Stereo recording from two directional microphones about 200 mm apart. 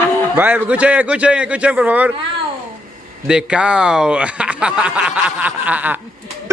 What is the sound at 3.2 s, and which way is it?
Speech, 5° right (ahead or behind).